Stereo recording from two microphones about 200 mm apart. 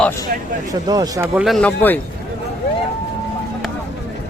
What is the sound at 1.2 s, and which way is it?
Speech, 5° right (ahead or behind).